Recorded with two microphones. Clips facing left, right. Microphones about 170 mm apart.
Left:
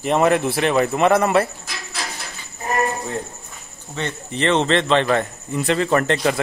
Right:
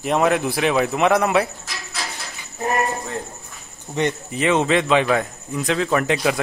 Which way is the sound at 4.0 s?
15° right (ahead or behind).